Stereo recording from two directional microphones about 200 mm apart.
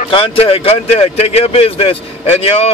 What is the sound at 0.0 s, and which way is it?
A man's voice, 30° left (ahead or behind).